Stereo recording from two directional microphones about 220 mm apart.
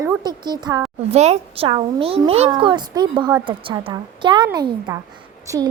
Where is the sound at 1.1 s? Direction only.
30° right (ahead or behind).